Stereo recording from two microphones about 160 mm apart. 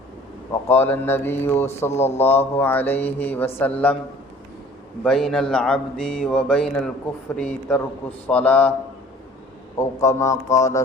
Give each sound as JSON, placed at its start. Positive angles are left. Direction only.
{"t": 0.7, "sound": "speech", "side_deg": 15}
{"t": 1.9, "sound": "speech", "side_deg": 45}
{"t": 2.1, "sound": "speech", "side_deg": 15}
{"t": 5.0, "sound": "speech", "side_deg": 5}
{"t": 9.7, "sound": "a man's voice", "side_deg": 20}